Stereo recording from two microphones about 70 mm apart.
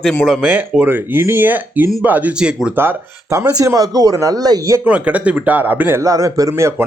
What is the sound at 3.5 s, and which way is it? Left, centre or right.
Speech, right.